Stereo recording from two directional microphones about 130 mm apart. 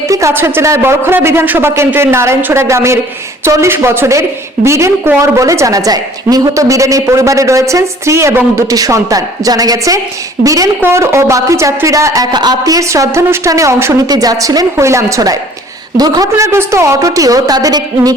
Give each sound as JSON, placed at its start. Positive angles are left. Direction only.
{"t": 0.1, "sound": "a woman's voice", "side_deg": -25}